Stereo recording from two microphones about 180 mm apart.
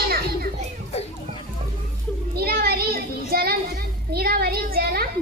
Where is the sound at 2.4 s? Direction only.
60° right (ahead or behind).